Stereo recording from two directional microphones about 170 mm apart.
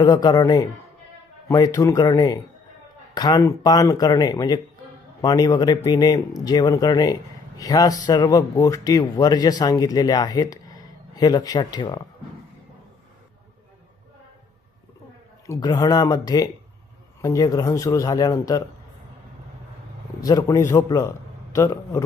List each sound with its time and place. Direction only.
0.0 s speech: 20° left (ahead or behind)
15.4 s speech: 20° left (ahead or behind)
20.2 s a man's voice: 20° left (ahead or behind)